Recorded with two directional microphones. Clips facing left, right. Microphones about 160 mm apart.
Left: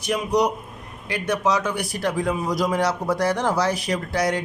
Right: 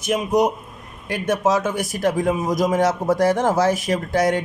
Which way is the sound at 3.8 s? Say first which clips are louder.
Right 3 dB; 25° right (ahead or behind).